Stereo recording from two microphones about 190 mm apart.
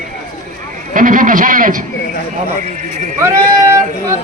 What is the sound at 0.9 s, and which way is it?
Speech, 45° right (ahead or behind).